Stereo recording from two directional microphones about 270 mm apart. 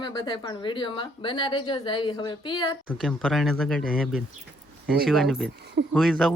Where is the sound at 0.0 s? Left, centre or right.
Centre.